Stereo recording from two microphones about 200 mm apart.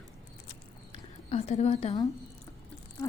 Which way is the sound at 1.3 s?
30° left (ahead or behind).